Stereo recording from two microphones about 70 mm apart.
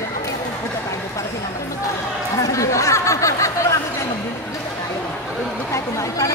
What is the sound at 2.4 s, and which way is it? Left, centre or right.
Chatter, left.